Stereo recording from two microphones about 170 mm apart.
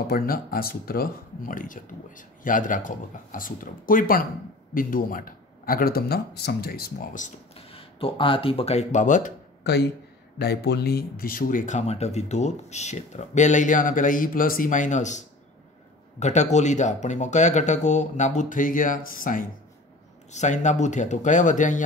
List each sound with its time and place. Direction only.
0.0 s a man's voice: 60° left (ahead or behind)
7.7 s speech: 30° left (ahead or behind); by 9.3 s 45° left (ahead or behind)
9.6 s a sound: 75° left (ahead or behind)
10.4 s speech: 70° left (ahead or behind); by 21.8 s 45° left (ahead or behind)